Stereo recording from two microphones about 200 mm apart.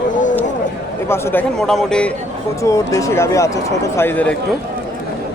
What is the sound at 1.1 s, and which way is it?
Speech, 10° left (ahead or behind).